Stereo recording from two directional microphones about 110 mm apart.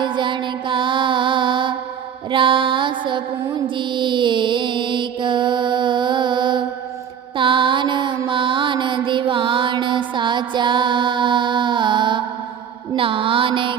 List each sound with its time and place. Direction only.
0.0 s music: 45° right (ahead or behind)
3.8 s mantra: 45° right (ahead or behind)